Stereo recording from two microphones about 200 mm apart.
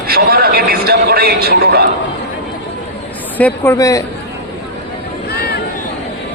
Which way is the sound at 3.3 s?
10° left (ahead or behind).